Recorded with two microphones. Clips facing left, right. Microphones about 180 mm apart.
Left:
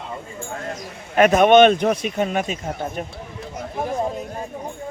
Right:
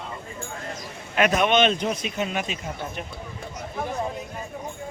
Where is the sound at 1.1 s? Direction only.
45° left (ahead or behind).